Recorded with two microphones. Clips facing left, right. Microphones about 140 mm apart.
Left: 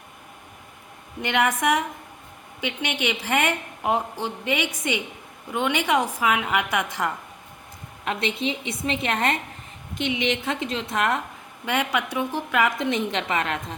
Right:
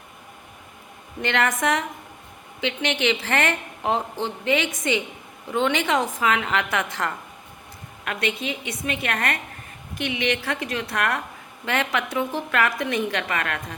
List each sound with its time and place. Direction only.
1.2 s a woman's voice: 15° left (ahead or behind)
8.0 s a woman's voice: 25° left (ahead or behind)